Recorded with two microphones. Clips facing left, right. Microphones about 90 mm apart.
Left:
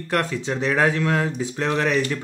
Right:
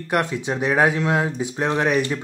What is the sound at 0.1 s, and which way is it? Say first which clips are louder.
Speech: right 1 dB; 20° right (ahead or behind).